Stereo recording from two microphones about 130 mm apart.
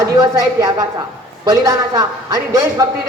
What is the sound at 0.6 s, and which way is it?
A woman's voice, 25° right (ahead or behind).